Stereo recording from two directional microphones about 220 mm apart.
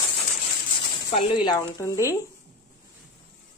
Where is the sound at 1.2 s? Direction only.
20° left (ahead or behind).